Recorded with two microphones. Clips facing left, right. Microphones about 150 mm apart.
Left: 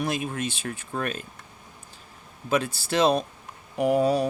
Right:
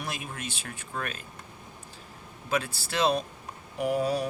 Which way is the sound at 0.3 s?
25° left (ahead or behind).